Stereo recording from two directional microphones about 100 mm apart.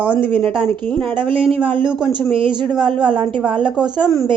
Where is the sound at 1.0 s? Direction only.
60° right (ahead or behind).